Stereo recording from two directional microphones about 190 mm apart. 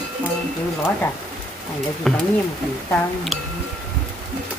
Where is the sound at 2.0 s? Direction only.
Centre (ahead or behind).